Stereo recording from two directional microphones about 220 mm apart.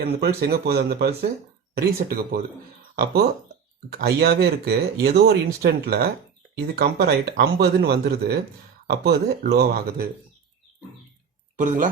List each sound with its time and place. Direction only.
0.0 s speech: 45° right (ahead or behind)
11.5 s speech: 35° right (ahead or behind)